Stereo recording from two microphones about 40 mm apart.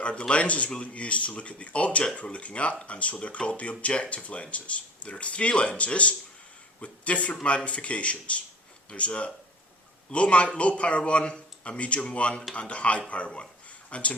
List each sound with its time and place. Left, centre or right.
0.0 s speech: left